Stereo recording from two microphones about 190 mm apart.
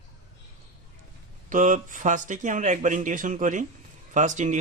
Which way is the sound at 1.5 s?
45° right (ahead or behind).